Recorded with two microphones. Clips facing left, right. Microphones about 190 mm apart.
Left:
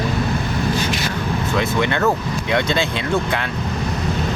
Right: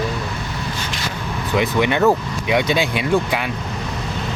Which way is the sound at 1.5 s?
15° right (ahead or behind).